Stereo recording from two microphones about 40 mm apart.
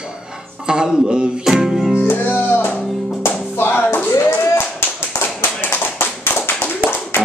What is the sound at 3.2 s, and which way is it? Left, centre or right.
Music, left.